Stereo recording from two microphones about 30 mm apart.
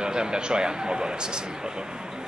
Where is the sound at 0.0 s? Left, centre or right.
Right.